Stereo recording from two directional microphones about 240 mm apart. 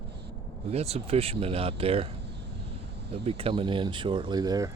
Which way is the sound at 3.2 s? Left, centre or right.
Right.